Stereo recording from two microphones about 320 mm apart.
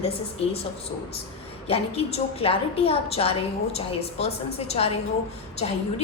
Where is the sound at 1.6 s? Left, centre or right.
Centre.